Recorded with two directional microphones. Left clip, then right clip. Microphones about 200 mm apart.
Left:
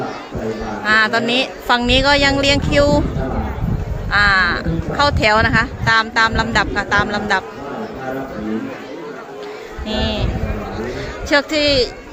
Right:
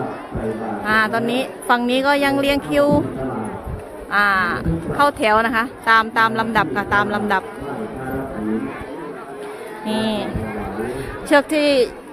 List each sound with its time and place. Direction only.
0.9 s speech: 5° right (ahead or behind)
4.1 s speech: 10° right (ahead or behind)
9.8 s speech: 25° right (ahead or behind)
11.3 s speech: 20° right (ahead or behind)